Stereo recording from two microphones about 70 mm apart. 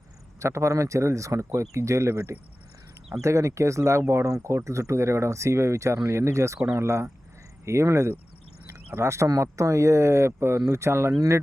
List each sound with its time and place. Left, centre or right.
0.3 s speech: right